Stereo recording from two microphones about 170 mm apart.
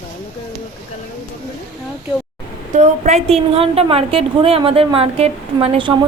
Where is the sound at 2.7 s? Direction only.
45° right (ahead or behind).